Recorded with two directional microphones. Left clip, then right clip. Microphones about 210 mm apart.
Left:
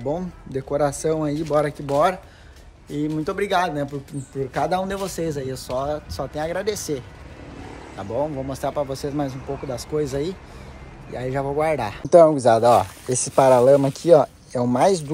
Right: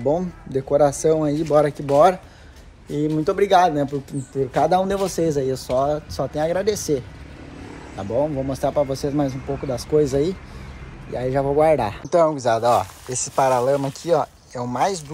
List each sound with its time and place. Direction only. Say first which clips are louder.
0.0 s speech: right 5 dB; 10° left (ahead or behind)
8.0 s speech: right 3 dB; 90° right
9.8 s speech: right 7 dB; 10° left (ahead or behind)
12.1 s speech: left 5 dB; 15° right (ahead or behind)